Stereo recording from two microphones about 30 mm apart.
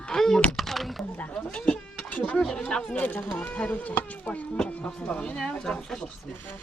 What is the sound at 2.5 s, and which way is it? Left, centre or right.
Speech, left.